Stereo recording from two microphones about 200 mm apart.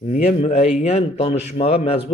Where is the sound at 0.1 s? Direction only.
40° left (ahead or behind).